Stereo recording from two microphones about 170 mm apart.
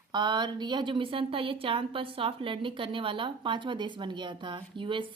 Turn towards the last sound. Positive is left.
turn(degrees=-30)  # may be behind; listen again after turning